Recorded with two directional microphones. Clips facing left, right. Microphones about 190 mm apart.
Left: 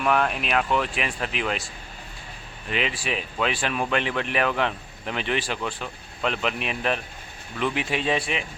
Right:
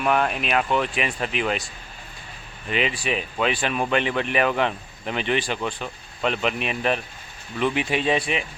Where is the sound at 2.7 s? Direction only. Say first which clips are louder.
Right 3 dB; centre (ahead or behind).